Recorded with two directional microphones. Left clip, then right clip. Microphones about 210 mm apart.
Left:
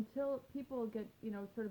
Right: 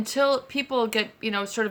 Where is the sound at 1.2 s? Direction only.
20° right (ahead or behind).